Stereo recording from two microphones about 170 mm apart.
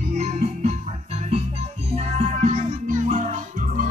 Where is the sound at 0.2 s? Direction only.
40° right (ahead or behind).